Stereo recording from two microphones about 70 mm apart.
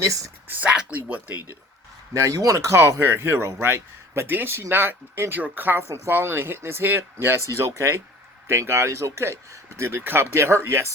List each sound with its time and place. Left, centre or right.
0.0 s speech: right
0.4 s speech: right
2.1 s speech: right
7.4 s speech: right